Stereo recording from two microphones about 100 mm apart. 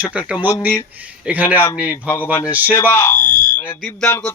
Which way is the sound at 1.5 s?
25° left (ahead or behind).